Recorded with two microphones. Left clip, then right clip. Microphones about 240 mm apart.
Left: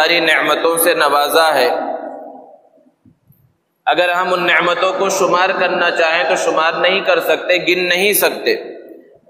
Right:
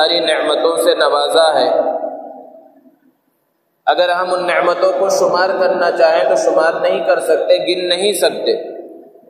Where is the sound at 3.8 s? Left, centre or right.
Left.